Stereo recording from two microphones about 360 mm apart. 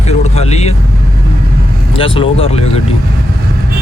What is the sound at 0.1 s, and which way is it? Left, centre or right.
Vehicle, centre.